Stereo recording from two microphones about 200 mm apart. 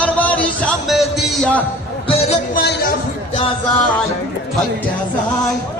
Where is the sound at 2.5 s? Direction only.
55° left (ahead or behind).